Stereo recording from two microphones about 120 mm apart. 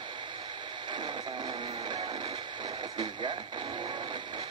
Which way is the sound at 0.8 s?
40° right (ahead or behind).